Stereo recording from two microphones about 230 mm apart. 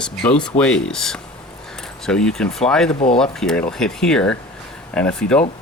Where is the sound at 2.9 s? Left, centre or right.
Left.